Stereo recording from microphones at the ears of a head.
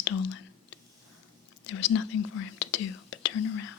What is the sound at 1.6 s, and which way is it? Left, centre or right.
Speech, left.